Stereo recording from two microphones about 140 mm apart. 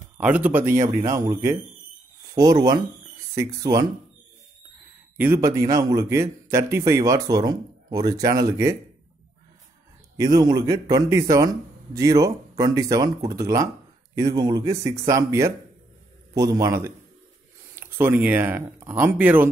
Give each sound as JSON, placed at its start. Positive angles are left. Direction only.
{"t": 0.2, "sound": "a man's voice", "side_deg": -10}
{"t": 2.3, "sound": "a man's voice", "side_deg": -25}
{"t": 5.1, "sound": "a man's voice", "side_deg": -15}
{"t": 10.3, "sound": "a man's voice", "side_deg": -30}